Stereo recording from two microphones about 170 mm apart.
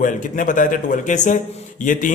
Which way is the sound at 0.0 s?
50° left (ahead or behind).